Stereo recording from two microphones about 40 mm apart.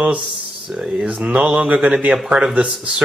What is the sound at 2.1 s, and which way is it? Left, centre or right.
Speech, centre.